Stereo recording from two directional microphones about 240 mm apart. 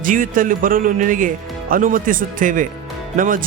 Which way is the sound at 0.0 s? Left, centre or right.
Right.